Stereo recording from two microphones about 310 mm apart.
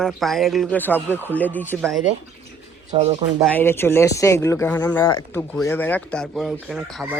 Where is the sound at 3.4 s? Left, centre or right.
Centre.